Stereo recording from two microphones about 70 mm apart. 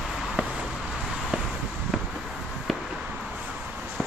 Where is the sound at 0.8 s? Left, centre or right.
Centre.